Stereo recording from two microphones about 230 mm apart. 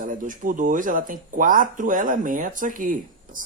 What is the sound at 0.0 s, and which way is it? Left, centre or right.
Speech, right.